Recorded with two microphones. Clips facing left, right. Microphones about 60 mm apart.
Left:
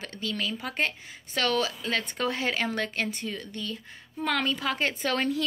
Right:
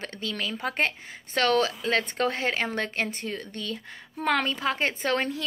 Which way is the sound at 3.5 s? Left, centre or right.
Right.